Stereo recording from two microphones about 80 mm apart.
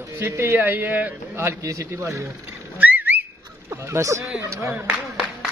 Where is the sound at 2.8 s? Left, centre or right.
Right.